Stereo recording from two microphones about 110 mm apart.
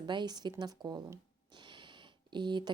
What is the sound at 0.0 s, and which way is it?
Speech, 45° right (ahead or behind).